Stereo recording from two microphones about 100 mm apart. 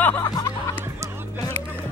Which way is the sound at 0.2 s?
40° left (ahead or behind).